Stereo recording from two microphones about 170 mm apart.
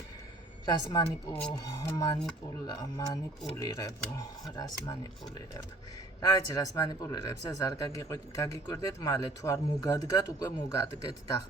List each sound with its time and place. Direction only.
0.6 s a woman's voice: 25° left (ahead or behind)
1.3 s speech: 5° left (ahead or behind)
1.7 s speech: 20° left (ahead or behind)
3.5 s speech: 20° left (ahead or behind)
6.2 s speech: 20° left (ahead or behind)